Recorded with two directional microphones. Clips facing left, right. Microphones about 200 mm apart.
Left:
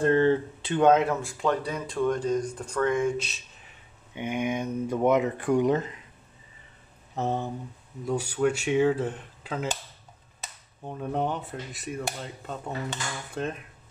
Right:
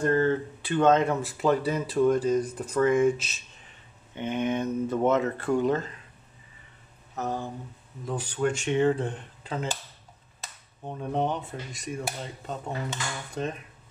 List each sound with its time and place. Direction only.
0.0 s speech: 30° left (ahead or behind)
0.8 s speech: 5° left (ahead or behind)
4.1 s speech: 10° left (ahead or behind)
7.2 s speech: 25° left (ahead or behind)
8.0 s speech: 10° left (ahead or behind)
11.0 s speech: 5° left (ahead or behind)